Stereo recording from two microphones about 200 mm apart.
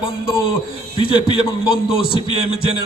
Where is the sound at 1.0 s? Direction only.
25° left (ahead or behind).